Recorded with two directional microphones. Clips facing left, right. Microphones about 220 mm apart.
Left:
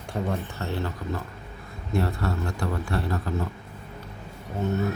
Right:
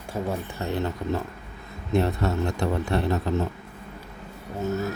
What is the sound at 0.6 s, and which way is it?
A man's voice, 20° right (ahead or behind).